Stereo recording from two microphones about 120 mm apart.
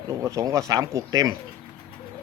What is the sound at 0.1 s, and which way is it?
Speech, 25° right (ahead or behind).